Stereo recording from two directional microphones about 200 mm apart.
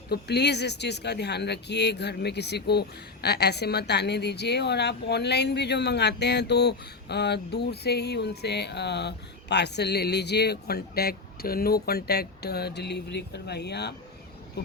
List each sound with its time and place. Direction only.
0.1 s speech: 55° left (ahead or behind)